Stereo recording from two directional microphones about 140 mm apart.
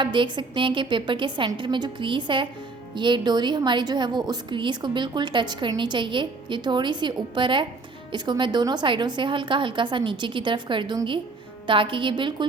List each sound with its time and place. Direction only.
0.0 s a woman's voice: 35° right (ahead or behind)